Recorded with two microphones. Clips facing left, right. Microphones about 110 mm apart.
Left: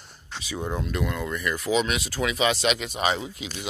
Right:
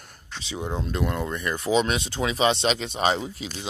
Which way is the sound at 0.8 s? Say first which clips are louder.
Right 1 dB; 30° right (ahead or behind).